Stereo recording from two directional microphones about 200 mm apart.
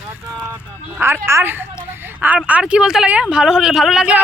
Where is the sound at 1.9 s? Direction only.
10° right (ahead or behind).